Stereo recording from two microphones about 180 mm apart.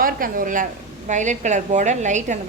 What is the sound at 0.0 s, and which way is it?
A woman's voice, 50° right (ahead or behind).